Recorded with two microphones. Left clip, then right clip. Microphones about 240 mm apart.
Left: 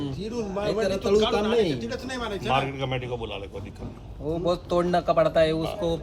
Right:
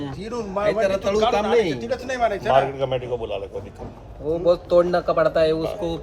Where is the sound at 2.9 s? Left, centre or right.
Left.